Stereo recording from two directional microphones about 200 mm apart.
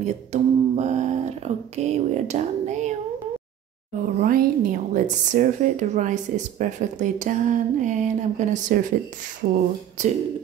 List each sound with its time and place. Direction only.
0.0 s a woman's voice: 35° right (ahead or behind)
4.2 s a woman's voice: 45° right (ahead or behind)